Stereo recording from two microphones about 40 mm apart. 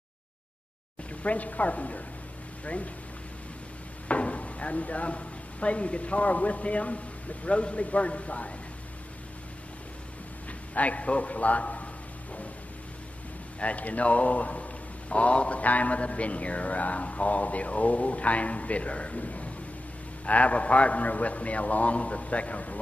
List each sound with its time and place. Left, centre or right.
1.2 s a man's voice: left
4.1 s a man's voice: left
10.7 s a man's voice: left
13.6 s a man's voice: left